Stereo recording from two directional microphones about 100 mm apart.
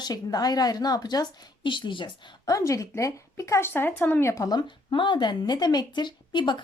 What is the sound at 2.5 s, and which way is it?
Speech, 35° left (ahead or behind).